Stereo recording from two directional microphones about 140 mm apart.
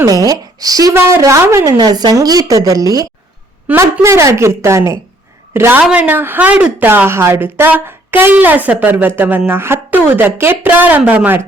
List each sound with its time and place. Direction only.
0.0 s a woman's voice: 25° right (ahead or behind)